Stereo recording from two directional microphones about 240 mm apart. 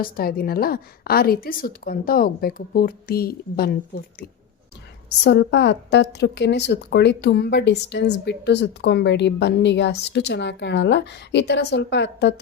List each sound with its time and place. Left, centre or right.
0.0 s a woman's voice: left